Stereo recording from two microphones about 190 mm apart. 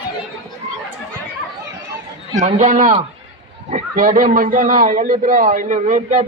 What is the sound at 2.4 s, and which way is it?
A man's voice, 40° right (ahead or behind).